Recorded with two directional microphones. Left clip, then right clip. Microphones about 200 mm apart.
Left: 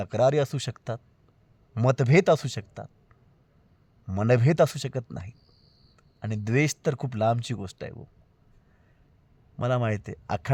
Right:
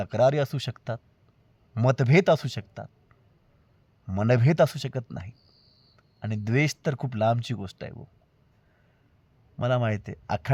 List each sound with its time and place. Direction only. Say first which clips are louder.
0.0 s speech: even; 20° left (ahead or behind)
4.0 s speech: left 1 dB; 20° left (ahead or behind)
9.6 s speech: right 1 dB; 20° left (ahead or behind)